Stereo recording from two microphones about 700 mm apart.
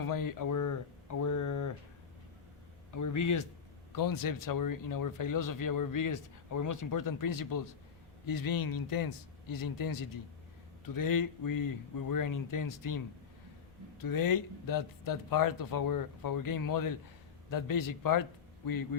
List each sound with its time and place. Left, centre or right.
0.0 s speech: left
2.9 s speech: left
14.0 s a man's voice: left